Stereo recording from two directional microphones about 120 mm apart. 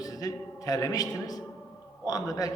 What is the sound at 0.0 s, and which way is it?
A man's voice, 30° left (ahead or behind).